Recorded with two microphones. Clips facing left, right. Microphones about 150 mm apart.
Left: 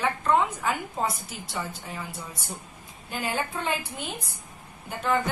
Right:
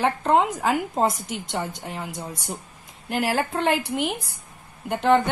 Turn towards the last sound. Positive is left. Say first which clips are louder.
# right 7 dB
turn(degrees=-80)